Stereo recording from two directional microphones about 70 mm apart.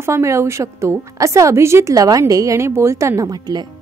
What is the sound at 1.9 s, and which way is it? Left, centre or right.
A woman's voice, right.